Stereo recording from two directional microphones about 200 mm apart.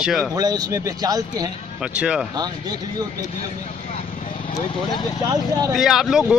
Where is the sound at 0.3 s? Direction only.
20° right (ahead or behind).